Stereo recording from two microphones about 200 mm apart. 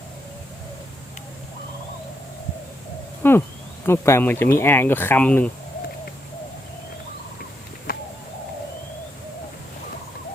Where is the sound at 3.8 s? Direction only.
10° left (ahead or behind).